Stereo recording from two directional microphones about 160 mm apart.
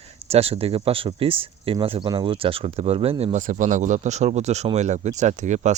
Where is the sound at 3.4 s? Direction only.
55° right (ahead or behind).